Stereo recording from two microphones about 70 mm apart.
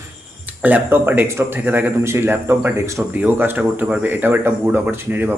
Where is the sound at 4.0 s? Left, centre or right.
Right.